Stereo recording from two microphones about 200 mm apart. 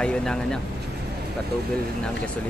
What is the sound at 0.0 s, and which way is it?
Speech, 5° left (ahead or behind).